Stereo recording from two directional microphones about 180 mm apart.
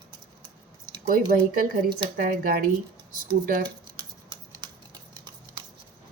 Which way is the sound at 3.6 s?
20° right (ahead or behind).